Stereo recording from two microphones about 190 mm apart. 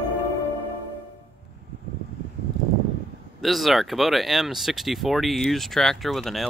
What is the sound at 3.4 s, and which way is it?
Speech, centre (ahead or behind).